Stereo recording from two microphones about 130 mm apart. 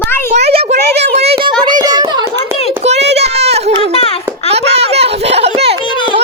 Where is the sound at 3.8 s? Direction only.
45° left (ahead or behind).